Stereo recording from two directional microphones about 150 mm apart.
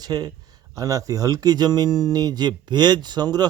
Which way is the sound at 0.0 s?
25° right (ahead or behind).